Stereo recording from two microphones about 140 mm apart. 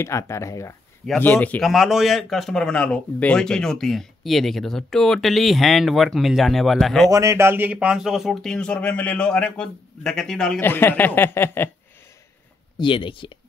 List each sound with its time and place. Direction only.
0.0 s speech: 20° left (ahead or behind)
1.2 s speech: 10° left (ahead or behind)
1.7 s a man's voice: centre (ahead or behind)
7.1 s a man's voice: 20° right (ahead or behind); by 10.6 s 5° left (ahead or behind)
10.6 s speech: 15° left (ahead or behind)
12.7 s speech: 35° left (ahead or behind)